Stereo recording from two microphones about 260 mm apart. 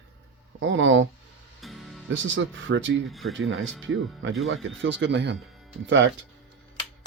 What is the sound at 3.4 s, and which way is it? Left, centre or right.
Speech, right.